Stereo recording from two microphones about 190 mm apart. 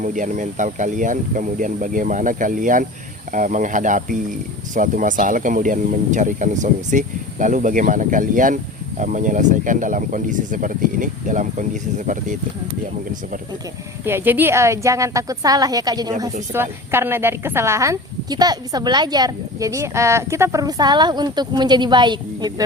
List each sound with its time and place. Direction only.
0.0 s speech: 40° right (ahead or behind)
14.0 s a woman's voice: 10° right (ahead or behind)